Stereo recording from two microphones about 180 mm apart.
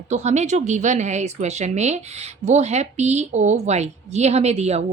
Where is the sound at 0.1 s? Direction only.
40° right (ahead or behind).